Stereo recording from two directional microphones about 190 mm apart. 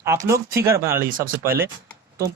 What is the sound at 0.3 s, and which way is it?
Speech, 15° right (ahead or behind).